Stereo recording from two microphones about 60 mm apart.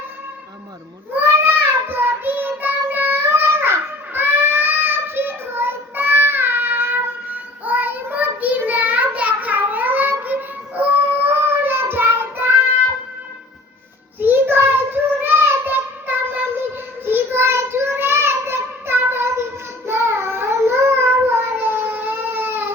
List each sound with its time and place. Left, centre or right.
1.1 s child singing: right
14.2 s child singing: right
21.2 s baby cry: right